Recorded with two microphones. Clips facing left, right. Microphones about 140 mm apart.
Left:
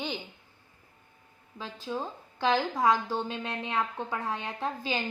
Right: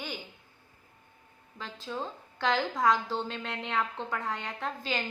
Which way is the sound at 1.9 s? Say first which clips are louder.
Left 2 dB; 15° left (ahead or behind).